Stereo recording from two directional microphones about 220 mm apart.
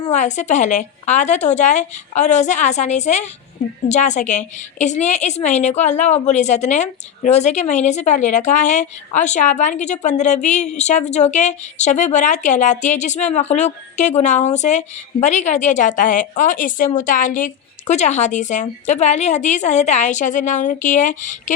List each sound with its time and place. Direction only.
0.0 s a woman's voice: 30° left (ahead or behind)